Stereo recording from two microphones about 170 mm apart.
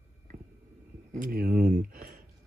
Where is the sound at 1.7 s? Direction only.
55° right (ahead or behind).